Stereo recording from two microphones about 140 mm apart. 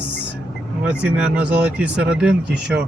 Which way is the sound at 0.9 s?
10° right (ahead or behind).